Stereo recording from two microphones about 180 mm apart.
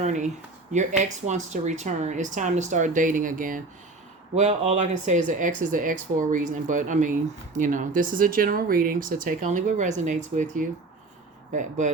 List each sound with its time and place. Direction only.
0.0 s speech: 40° right (ahead or behind)
4.4 s speech: 35° right (ahead or behind)